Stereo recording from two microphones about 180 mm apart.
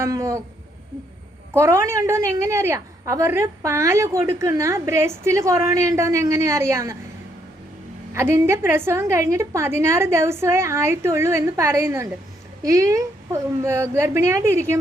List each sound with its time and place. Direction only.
0.0 s a woman's voice: 15° right (ahead or behind)
1.5 s a woman's voice: 15° right (ahead or behind)
8.1 s a woman's voice: 15° right (ahead or behind)